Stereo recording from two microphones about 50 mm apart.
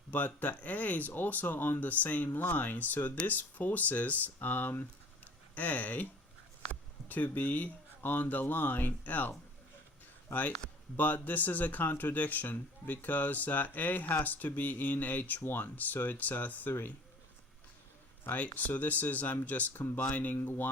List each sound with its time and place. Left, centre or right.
0.1 s speech: left
15.4 s speech: left
18.3 s speech: left
20.3 s speech: left